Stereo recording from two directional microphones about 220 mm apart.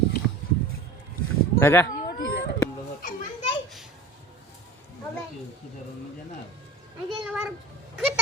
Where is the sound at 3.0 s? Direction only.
40° left (ahead or behind).